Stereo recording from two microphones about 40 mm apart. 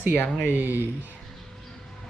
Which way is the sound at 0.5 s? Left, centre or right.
Right.